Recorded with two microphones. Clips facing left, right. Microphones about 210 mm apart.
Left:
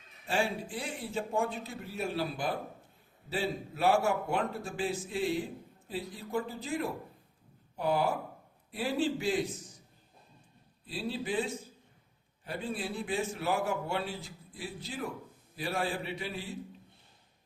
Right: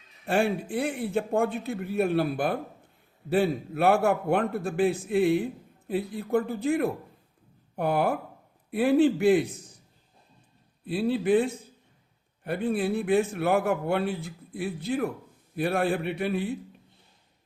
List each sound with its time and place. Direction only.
0.3 s a man's voice: 60° right (ahead or behind)
10.8 s a man's voice: 60° right (ahead or behind)